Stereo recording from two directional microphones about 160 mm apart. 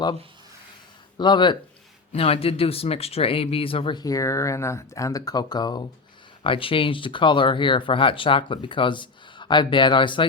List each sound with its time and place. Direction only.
1.2 s speech: 30° left (ahead or behind)